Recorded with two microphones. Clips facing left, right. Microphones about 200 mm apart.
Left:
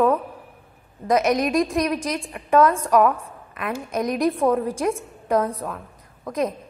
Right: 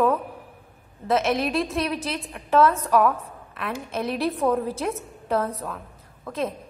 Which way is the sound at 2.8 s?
10° left (ahead or behind).